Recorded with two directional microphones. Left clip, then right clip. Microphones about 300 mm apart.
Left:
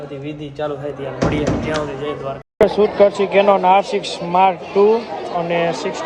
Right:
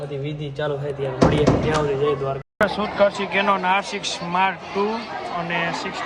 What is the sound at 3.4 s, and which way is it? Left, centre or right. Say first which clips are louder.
Speech: left 6 dB; right.